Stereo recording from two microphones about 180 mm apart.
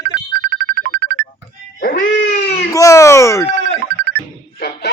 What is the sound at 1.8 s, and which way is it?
Dog, 50° left (ahead or behind).